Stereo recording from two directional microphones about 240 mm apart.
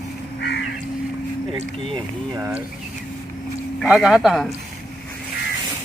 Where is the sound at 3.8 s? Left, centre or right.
Centre.